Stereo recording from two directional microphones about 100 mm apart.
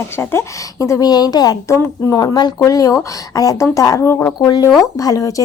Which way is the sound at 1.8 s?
30° left (ahead or behind).